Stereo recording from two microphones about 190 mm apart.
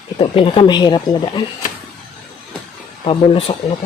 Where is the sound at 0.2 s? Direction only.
30° left (ahead or behind).